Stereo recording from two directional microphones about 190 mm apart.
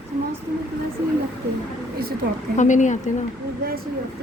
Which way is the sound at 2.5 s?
40° left (ahead or behind).